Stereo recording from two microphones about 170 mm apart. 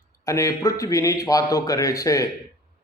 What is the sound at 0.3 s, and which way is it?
A man's voice, 20° left (ahead or behind).